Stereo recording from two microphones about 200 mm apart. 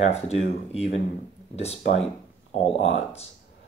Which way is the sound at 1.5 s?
30° left (ahead or behind).